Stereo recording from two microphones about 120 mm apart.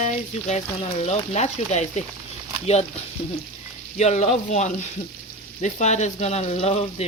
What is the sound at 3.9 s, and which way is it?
Speech, 70° left (ahead or behind).